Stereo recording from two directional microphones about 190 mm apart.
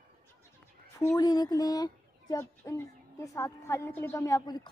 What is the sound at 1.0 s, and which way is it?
A woman's voice, 20° left (ahead or behind).